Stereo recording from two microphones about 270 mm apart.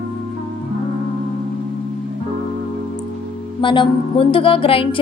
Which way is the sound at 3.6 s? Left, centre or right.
Centre.